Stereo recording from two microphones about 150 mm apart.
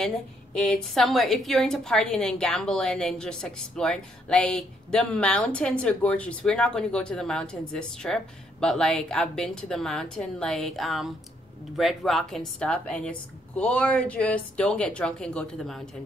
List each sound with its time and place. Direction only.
0.6 s a woman's voice: 5° left (ahead or behind)